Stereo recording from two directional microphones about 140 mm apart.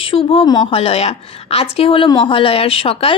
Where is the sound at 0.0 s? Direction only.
40° left (ahead or behind).